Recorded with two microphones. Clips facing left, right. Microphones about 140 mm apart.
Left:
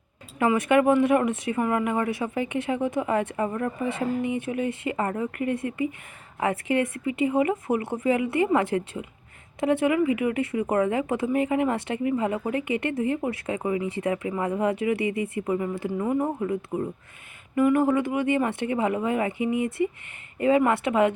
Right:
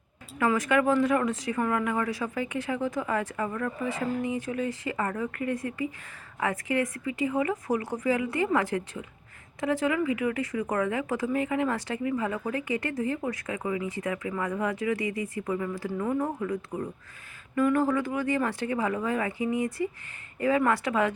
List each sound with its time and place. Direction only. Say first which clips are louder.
0.3 s speech: left 4 dB; 25° left (ahead or behind)